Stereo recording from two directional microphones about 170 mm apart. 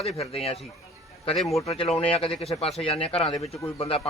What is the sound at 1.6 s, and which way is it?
Speech, 30° left (ahead or behind).